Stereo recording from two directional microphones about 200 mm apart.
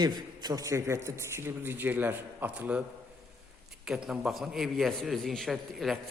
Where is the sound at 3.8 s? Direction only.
5° right (ahead or behind).